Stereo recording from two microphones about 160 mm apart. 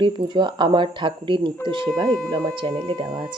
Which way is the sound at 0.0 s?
30° right (ahead or behind).